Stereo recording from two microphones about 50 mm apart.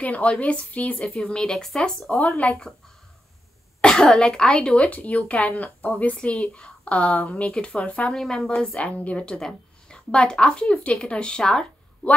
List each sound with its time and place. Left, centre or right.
0.0 s speech: left
1.0 s speech: centre
2.0 s speech: left
3.8 s speech: centre
7.5 s speech: centre
7.8 s speech: left
8.1 s speech: centre
8.7 s speech: left